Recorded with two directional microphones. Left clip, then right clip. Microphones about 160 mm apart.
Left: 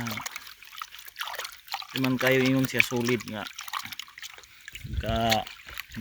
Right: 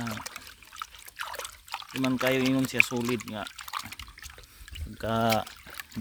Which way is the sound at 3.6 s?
35° left (ahead or behind).